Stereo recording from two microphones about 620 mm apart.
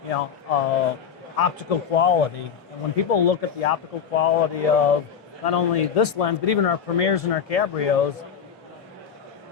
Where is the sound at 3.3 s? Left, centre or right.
Left.